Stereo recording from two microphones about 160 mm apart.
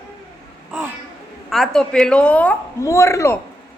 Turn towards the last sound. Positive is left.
turn(degrees=20)  # may be behind; listen again after turning